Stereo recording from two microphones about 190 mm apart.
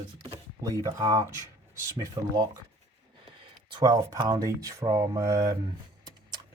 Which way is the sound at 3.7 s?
20° right (ahead or behind).